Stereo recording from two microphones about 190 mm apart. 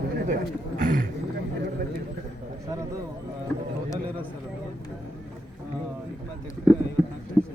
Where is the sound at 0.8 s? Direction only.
45° right (ahead or behind).